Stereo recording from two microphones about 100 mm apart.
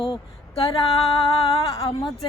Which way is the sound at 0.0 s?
60° left (ahead or behind).